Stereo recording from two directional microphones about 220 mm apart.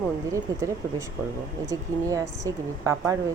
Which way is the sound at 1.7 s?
15° right (ahead or behind).